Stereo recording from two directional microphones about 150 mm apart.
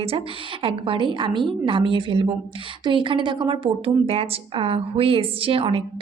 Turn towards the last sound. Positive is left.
turn(degrees=-40)  # may be behind; listen again after turning